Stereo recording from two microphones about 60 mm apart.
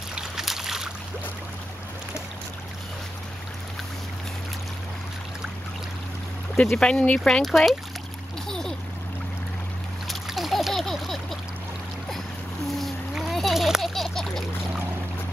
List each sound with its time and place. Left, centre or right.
0.1 s boat: centre
6.5 s speech: centre
7.4 s speech: centre
8.5 s splash: centre
10.0 s splash: centre
12.6 s boat: centre
13.1 s a sound: centre